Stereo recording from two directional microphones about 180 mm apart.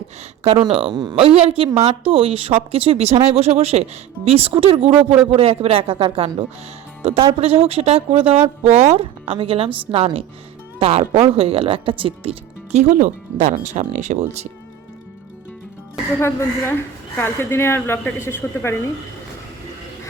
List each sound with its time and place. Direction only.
0.4 s speech: 30° right (ahead or behind)
16.2 s speech: 15° left (ahead or behind)